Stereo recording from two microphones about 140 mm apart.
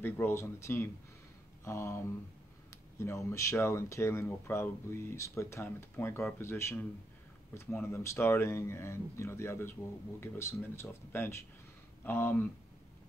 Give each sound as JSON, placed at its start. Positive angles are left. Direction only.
{"t": 0.0, "sound": "speech", "side_deg": 15}
{"t": 1.6, "sound": "a sound", "side_deg": 20}
{"t": 2.7, "sound": "speech", "side_deg": 20}